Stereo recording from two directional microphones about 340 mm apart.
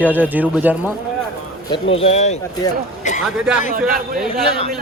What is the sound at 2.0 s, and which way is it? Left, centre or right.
A man's voice, centre.